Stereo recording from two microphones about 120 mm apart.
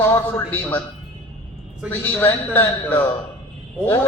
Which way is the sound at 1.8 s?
15° left (ahead or behind).